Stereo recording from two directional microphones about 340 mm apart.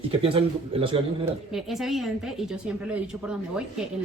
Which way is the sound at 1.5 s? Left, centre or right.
Centre.